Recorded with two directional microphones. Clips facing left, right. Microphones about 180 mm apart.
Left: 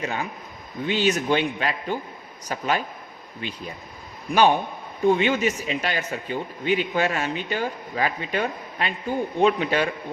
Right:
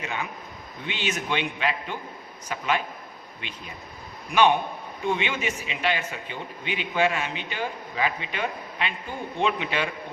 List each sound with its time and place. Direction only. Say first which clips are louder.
0.0 s a man's voice: left 4 dB; 40° left (ahead or behind)